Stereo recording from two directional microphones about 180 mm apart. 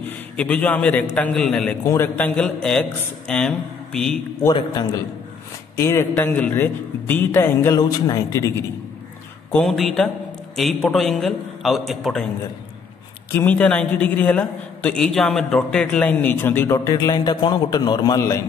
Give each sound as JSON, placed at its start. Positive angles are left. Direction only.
{"t": 0.0, "sound": "a man's voice", "side_deg": 10}
{"t": 4.4, "sound": "a man's voice", "side_deg": 25}
{"t": 5.8, "sound": "a man's voice", "side_deg": 15}
{"t": 9.5, "sound": "speech", "side_deg": 0}
{"t": 13.3, "sound": "a man's voice", "side_deg": 10}